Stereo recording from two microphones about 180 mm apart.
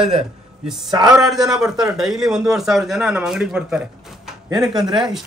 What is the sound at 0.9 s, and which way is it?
Speech, 20° right (ahead or behind).